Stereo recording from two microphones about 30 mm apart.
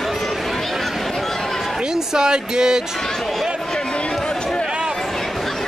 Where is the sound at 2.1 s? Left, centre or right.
Right.